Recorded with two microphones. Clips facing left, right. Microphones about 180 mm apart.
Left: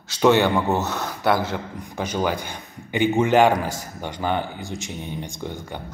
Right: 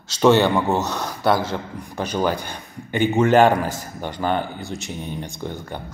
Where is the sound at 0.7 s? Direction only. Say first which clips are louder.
Right 1 dB; 15° right (ahead or behind).